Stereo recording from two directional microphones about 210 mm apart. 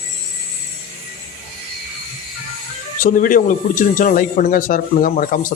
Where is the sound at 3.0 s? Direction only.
40° left (ahead or behind).